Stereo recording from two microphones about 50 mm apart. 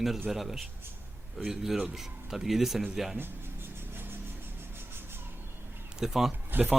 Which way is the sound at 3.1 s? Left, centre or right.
Right.